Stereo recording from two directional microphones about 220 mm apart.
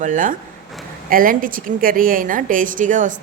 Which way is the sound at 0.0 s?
35° right (ahead or behind).